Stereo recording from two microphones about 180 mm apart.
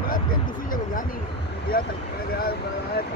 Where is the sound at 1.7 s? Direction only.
55° left (ahead or behind).